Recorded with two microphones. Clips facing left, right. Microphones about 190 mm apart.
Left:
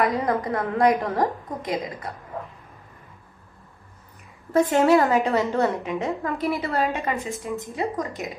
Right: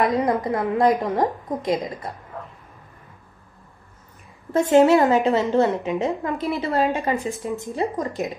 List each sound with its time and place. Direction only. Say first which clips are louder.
0.2 s a woman's voice: right 3 dB; 25° right (ahead or behind)
4.5 s a woman's voice: right 3 dB; 25° right (ahead or behind)
6.3 s a woman's voice: even; centre (ahead or behind)
6.6 s a woman's voice: right 3 dB; 25° right (ahead or behind)